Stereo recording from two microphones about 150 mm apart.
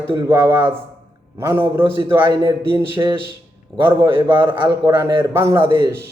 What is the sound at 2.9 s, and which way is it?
Speech, 35° right (ahead or behind).